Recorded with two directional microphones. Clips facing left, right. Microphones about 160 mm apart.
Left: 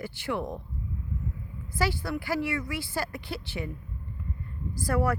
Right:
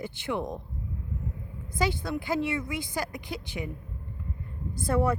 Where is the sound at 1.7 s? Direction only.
20° right (ahead or behind).